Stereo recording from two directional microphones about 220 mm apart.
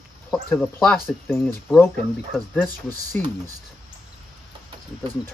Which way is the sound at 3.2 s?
5° left (ahead or behind).